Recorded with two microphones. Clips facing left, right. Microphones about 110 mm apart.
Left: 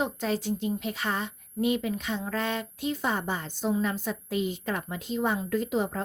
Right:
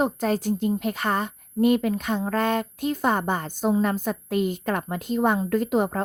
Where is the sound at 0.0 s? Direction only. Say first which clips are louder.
Right 5 dB; 45° right (ahead or behind).